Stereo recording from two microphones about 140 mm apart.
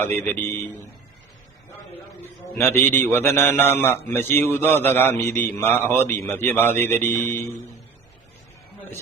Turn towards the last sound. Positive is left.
turn(degrees=15)  # may be behind; listen again after turning